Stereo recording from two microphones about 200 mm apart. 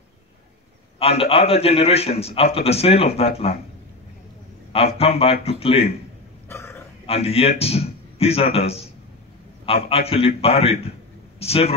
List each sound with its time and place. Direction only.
0.9 s a man's voice: 30° left (ahead or behind)
4.7 s a man's voice: 30° left (ahead or behind)
6.5 s a sound: 15° left (ahead or behind)
7.1 s a man's voice: 30° left (ahead or behind)